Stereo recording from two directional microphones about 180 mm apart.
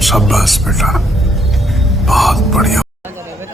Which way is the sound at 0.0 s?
Centre (ahead or behind).